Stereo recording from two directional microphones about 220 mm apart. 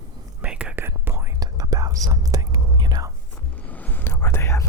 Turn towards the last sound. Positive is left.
turn(degrees=10)  # may be behind; listen again after turning